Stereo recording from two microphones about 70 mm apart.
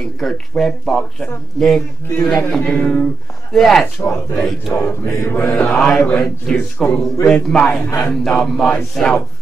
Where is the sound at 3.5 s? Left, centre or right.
Centre.